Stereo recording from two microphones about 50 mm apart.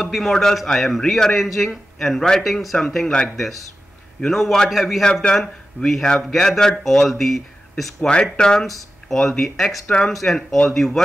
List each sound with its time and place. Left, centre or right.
0.0 s a man's voice: centre
0.3 s a man's voice: centre
5.2 s a man's voice: centre
6.1 s speech: centre
8.1 s speech: centre